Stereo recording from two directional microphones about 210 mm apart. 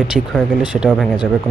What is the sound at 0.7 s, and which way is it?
Speech, 5° right (ahead or behind).